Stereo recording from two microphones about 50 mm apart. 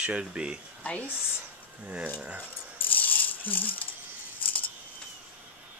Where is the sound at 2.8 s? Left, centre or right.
Left.